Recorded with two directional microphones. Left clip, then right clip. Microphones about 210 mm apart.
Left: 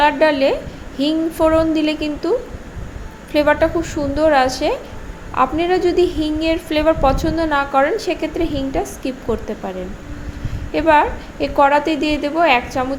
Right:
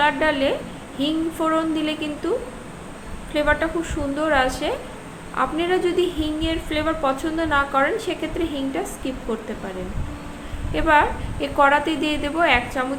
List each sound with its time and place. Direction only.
0.0 s a woman's voice: 25° left (ahead or behind)
3.3 s a woman's voice: 25° left (ahead or behind)
10.8 s a woman's voice: 20° left (ahead or behind)